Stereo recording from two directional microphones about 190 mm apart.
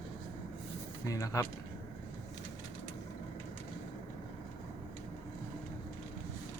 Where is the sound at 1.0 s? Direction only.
20° left (ahead or behind).